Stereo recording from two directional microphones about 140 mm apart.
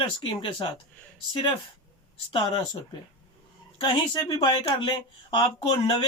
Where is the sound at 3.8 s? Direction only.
35° left (ahead or behind).